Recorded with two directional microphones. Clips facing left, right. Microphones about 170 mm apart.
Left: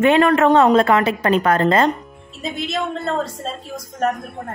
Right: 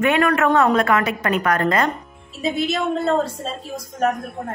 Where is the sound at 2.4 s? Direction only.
Centre (ahead or behind).